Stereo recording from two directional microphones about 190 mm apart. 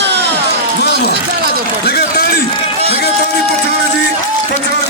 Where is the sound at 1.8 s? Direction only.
55° left (ahead or behind).